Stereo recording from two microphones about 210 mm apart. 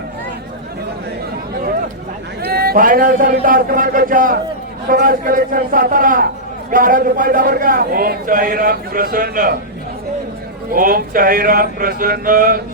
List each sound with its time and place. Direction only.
2.4 s a man's voice: 45° right (ahead or behind)
10.7 s a man's voice: 40° right (ahead or behind)